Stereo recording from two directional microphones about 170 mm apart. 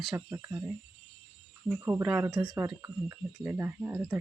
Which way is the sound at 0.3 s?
15° right (ahead or behind).